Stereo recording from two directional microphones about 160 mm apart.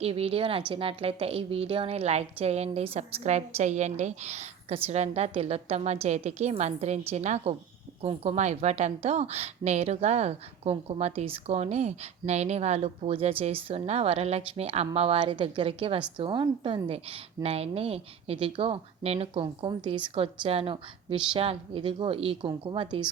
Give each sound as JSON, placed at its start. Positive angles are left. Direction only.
{"t": 0.0, "sound": "a woman's voice", "side_deg": -40}